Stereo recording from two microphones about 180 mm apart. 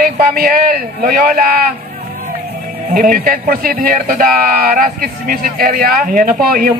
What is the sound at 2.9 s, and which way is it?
Speech, 50° right (ahead or behind).